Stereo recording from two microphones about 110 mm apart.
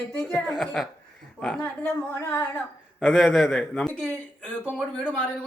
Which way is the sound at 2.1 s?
25° left (ahead or behind).